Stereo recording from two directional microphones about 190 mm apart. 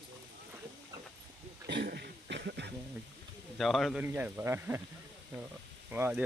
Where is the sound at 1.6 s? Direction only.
60° right (ahead or behind).